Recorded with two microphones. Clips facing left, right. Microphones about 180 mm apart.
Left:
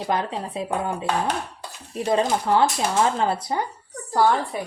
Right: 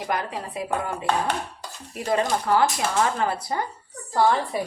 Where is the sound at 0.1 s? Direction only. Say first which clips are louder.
Left 3 dB; 25° left (ahead or behind).